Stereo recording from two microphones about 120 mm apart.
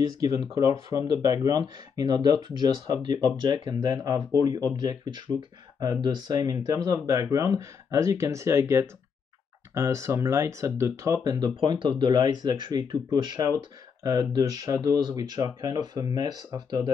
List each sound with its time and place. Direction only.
0.0 s speech: 30° right (ahead or behind)